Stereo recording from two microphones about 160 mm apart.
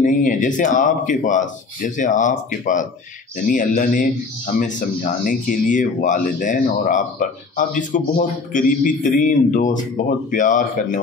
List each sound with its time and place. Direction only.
0.0 s a man's voice: 55° left (ahead or behind)